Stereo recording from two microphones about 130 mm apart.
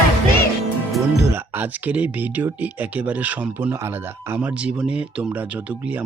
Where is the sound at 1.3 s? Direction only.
15° right (ahead or behind).